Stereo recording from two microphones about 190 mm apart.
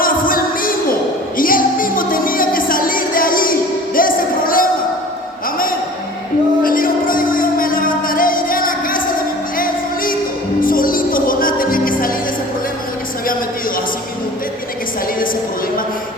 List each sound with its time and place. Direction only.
0.0 s music: 45° left (ahead or behind)
6.6 s music: 50° left (ahead or behind)